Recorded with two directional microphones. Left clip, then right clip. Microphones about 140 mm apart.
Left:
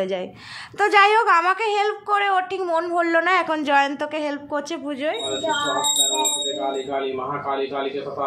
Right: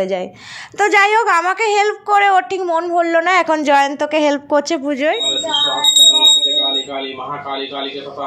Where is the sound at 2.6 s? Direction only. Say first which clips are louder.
Right 5 dB; 10° right (ahead or behind).